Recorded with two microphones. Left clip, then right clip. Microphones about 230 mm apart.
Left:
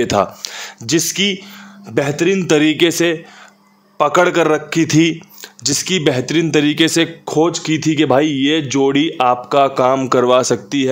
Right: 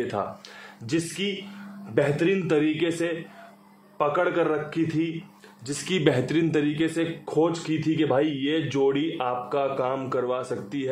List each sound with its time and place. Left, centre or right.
0.0 s speech: left
5.8 s speech: left